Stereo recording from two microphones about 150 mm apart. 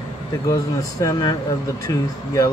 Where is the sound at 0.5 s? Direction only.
20° left (ahead or behind).